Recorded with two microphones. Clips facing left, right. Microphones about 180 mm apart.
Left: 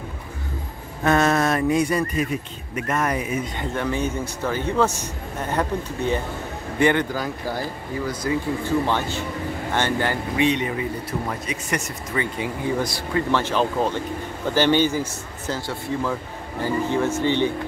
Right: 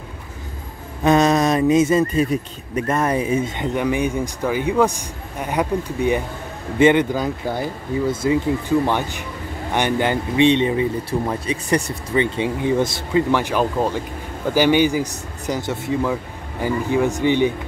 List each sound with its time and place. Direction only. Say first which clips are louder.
1.0 s speech: right 4 dB; 15° right (ahead or behind)